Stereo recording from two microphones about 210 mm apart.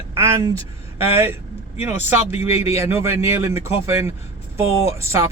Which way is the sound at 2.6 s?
10° right (ahead or behind).